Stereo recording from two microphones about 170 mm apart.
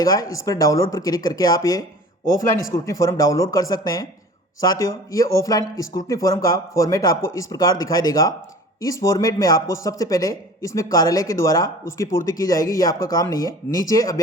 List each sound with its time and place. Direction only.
0.0 s speech: 20° left (ahead or behind)